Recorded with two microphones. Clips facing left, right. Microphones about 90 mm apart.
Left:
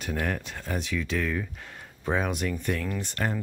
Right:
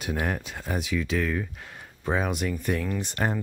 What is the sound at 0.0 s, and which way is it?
Speech, 15° right (ahead or behind).